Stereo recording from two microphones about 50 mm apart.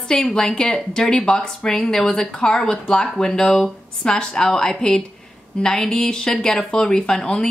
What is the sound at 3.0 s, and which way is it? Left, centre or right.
A woman's voice, centre.